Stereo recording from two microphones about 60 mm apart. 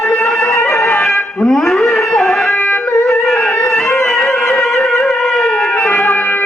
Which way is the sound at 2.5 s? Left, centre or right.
Left.